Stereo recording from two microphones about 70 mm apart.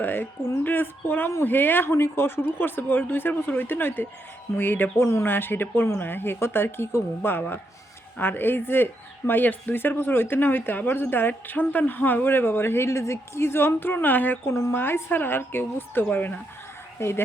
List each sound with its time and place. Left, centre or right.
0.0 s a woman's voice: left
14.5 s a woman's voice: left
17.0 s a woman's voice: left